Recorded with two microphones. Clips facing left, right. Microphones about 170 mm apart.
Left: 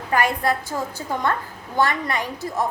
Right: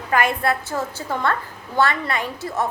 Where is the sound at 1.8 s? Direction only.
15° left (ahead or behind).